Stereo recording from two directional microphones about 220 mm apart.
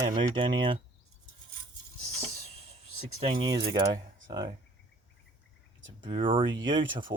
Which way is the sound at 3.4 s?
20° right (ahead or behind).